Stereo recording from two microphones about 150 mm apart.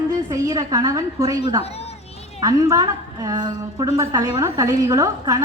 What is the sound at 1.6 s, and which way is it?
Speech, 45° left (ahead or behind).